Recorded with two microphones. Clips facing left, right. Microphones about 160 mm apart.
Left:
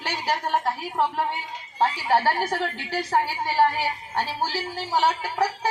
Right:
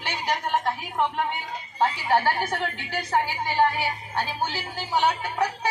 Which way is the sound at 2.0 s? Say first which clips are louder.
Left 1 dB; 35° left (ahead or behind).